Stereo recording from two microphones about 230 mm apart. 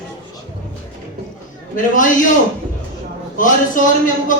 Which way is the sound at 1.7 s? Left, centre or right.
Left.